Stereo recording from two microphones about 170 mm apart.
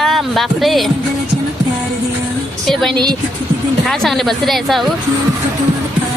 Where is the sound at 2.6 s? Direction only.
Centre (ahead or behind).